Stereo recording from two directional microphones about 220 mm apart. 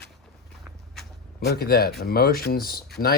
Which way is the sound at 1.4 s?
45° left (ahead or behind).